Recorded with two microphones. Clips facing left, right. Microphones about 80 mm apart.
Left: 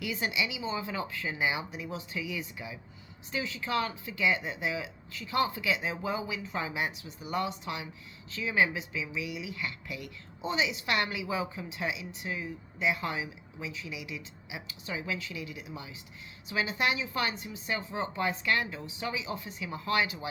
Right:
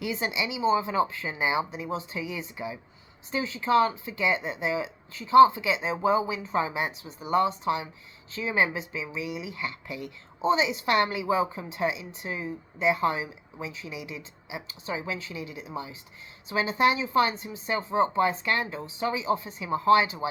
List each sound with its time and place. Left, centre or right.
0.0 s a woman's voice: right